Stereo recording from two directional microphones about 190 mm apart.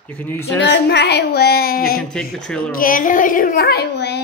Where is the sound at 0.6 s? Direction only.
65° left (ahead or behind).